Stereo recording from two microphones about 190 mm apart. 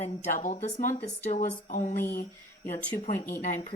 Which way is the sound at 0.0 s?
40° left (ahead or behind).